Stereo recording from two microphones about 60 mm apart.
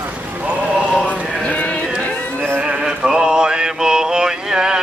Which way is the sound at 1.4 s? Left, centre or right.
Left.